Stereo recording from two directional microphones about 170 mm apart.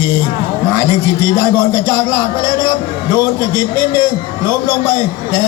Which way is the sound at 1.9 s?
15° left (ahead or behind).